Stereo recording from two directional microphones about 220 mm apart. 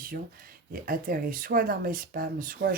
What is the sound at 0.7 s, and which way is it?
Speech, 40° right (ahead or behind).